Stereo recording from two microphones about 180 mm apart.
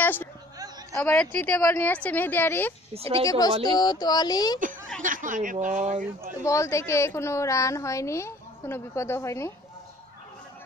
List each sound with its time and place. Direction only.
0.0 s a woman's voice: 10° left (ahead or behind)
2.9 s speech: 30° right (ahead or behind)
3.3 s speech: 20° left (ahead or behind)
5.0 s speech: 45° right (ahead or behind)
6.4 s a woman's voice: 15° left (ahead or behind)